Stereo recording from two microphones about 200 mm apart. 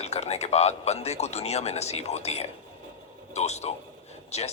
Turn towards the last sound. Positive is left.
turn(degrees=35)  # may be behind; listen again after turning